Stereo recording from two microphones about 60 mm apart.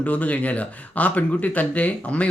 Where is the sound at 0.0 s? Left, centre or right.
Left.